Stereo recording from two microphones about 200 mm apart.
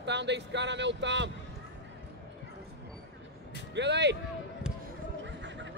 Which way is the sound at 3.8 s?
60° right (ahead or behind).